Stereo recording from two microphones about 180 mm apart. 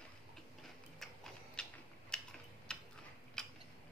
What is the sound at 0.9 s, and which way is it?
Tick-tock, centre (ahead or behind).